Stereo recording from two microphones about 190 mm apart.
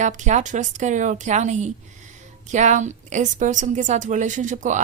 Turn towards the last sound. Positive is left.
turn(degrees=-40)  # may be behind; listen again after turning